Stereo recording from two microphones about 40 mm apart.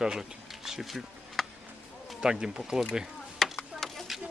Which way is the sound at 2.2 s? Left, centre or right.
Centre.